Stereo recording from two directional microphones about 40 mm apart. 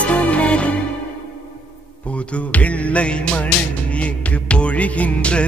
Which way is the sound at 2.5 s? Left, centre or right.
Left.